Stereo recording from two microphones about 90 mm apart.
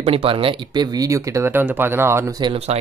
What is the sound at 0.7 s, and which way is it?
Speech, 40° right (ahead or behind).